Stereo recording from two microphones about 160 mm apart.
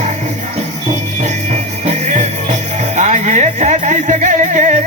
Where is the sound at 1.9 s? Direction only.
50° right (ahead or behind).